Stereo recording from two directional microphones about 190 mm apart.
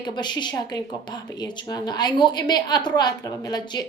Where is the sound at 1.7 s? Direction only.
20° left (ahead or behind).